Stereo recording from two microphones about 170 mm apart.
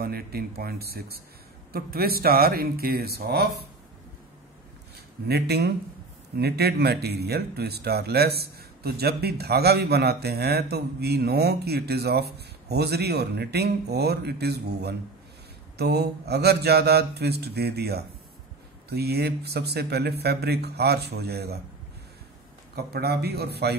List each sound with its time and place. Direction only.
0.0 s speech: 65° right (ahead or behind)
5.3 s speech: 70° right (ahead or behind)
22.8 s speech: 70° right (ahead or behind)